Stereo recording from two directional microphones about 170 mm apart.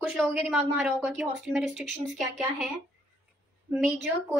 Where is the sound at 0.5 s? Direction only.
Centre (ahead or behind).